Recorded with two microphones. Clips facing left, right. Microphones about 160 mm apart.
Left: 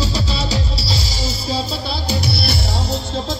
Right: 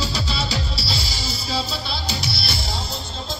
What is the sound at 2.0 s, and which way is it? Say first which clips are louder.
Music: left 6 dB; 55° left (ahead or behind).